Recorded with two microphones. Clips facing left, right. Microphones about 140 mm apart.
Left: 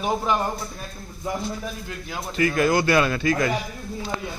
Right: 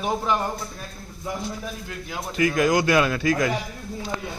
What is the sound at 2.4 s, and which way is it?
Speech, 10° right (ahead or behind).